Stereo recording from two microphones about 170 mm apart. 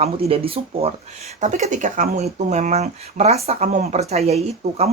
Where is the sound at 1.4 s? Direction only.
45° right (ahead or behind).